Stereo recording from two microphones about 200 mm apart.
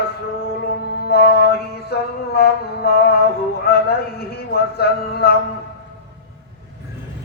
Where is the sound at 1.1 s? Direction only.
50° left (ahead or behind).